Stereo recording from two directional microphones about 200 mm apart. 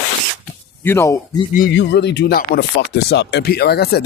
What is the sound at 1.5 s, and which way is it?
Speech, 45° left (ahead or behind).